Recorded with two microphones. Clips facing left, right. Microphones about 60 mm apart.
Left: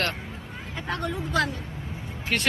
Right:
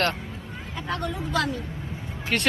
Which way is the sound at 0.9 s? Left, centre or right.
Left.